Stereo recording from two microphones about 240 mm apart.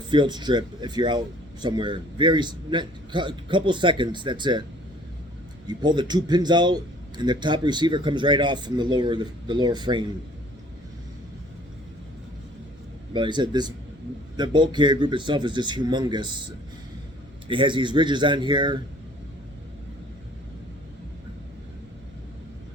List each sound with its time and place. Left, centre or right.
0.1 s a man's voice: centre
5.6 s a man's voice: centre
13.1 s a man's voice: centre
17.5 s a man's voice: right